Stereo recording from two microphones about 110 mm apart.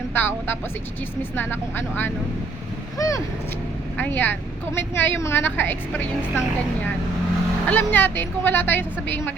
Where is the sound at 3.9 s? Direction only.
15° left (ahead or behind).